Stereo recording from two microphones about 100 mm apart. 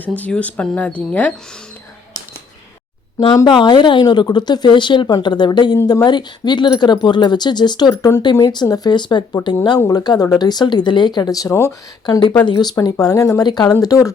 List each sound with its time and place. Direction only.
0.0 s speech: 15° left (ahead or behind)
3.2 s speech: 35° left (ahead or behind)
3.6 s speech: 50° left (ahead or behind)
5.7 s speech: 35° left (ahead or behind)
12.7 s speech: 35° left (ahead or behind)